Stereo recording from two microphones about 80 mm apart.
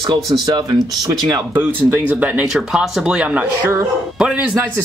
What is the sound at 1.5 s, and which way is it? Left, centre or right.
Speech, right.